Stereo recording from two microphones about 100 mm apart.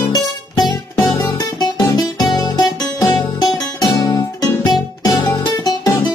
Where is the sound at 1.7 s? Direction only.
45° left (ahead or behind).